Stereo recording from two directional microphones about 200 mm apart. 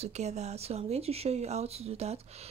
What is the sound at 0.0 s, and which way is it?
Speech, 35° right (ahead or behind).